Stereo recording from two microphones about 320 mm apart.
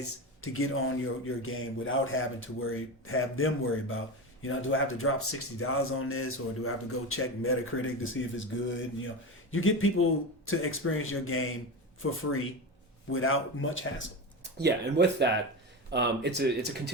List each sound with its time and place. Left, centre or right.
0.4 s speech: left
14.6 s speech: right